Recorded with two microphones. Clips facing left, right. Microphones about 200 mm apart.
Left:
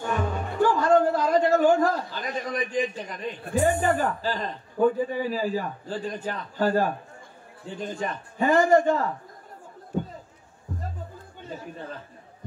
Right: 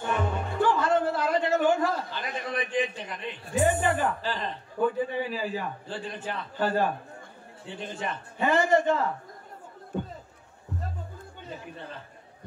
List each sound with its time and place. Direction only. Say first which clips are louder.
0.6 s a man's voice: left 4 dB; 40° left (ahead or behind)